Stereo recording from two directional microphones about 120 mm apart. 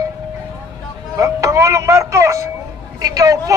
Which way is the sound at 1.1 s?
25° right (ahead or behind).